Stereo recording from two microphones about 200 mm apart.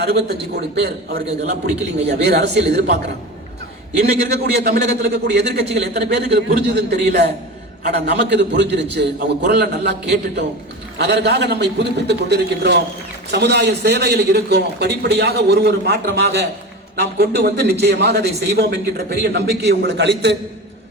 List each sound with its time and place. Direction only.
0.0 s a man's voice: 55° right (ahead or behind)
4.2 s a man's voice: 55° right (ahead or behind)